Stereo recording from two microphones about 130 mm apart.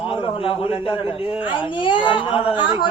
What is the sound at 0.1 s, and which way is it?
A man's voice, 45° left (ahead or behind).